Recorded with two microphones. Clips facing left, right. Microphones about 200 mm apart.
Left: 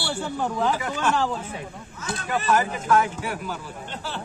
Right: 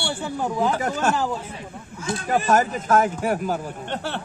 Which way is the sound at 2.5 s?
45° right (ahead or behind).